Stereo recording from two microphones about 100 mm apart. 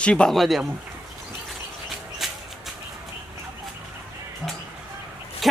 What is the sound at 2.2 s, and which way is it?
Music, centre (ahead or behind).